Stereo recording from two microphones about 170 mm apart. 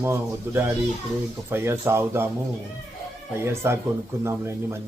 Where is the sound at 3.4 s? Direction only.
15° right (ahead or behind).